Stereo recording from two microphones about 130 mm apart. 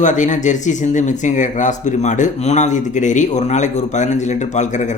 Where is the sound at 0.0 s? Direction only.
70° left (ahead or behind).